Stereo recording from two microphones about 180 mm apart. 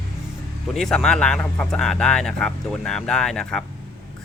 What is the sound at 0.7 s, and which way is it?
A man's voice, centre (ahead or behind).